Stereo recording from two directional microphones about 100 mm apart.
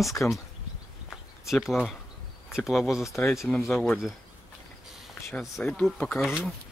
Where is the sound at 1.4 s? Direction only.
5° right (ahead or behind).